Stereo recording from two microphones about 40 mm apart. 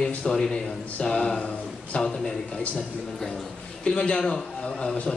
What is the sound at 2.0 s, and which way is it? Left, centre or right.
Speech, centre.